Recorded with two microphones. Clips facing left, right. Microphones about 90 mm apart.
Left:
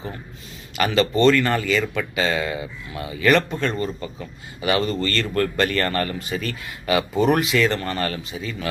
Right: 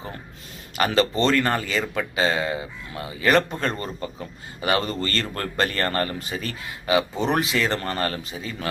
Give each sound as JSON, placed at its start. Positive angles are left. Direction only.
{"t": 0.9, "sound": "speech", "side_deg": -35}